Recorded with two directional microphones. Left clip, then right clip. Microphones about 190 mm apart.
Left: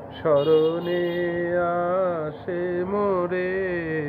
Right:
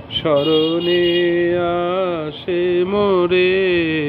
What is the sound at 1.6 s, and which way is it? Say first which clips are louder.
Carnatic music: right 4 dB; 45° right (ahead or behind).